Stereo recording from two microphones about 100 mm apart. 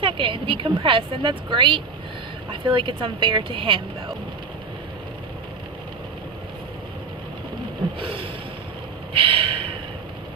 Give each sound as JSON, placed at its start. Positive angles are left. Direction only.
{"t": 0.0, "sound": "a woman's voice", "side_deg": -60}
{"t": 7.9, "sound": "a woman's voice", "side_deg": -60}